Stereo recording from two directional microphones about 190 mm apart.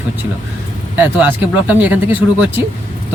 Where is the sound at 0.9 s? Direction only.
10° right (ahead or behind).